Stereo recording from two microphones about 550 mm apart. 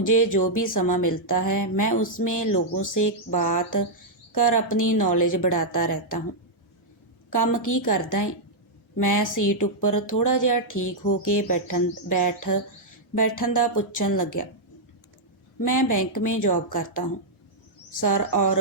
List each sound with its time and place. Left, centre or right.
0.2 s speech: left
4.4 s speech: left
7.4 s speech: left
15.6 s speech: left
18.0 s speech: left